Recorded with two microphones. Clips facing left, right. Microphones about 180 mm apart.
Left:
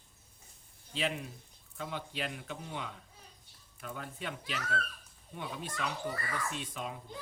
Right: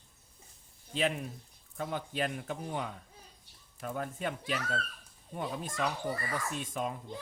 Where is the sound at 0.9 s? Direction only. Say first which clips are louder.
Right 4 dB; 50° right (ahead or behind).